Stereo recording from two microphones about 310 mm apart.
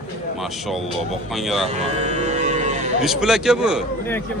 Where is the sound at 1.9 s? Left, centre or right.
Right.